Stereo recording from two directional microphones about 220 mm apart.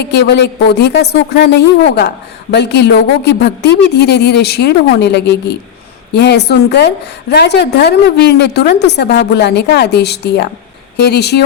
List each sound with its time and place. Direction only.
0.0 s a man's voice: 50° left (ahead or behind)